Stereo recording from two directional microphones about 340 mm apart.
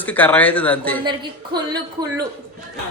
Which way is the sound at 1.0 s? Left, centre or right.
Centre.